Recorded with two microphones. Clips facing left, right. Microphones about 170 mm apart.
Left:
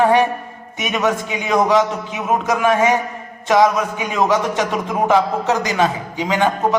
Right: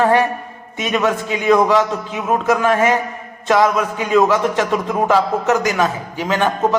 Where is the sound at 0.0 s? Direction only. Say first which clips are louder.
Even; 20° left (ahead or behind).